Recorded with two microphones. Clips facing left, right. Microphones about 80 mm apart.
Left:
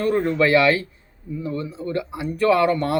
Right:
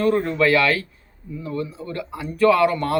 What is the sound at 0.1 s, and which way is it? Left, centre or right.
Speech, left.